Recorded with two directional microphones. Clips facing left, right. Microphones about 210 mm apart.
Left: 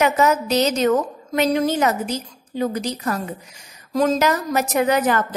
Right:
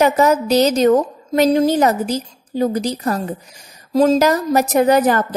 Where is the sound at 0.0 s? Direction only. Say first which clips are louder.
Right 4 dB; 35° right (ahead or behind).